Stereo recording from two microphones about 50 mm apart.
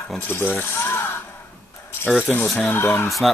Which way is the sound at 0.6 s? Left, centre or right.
Left.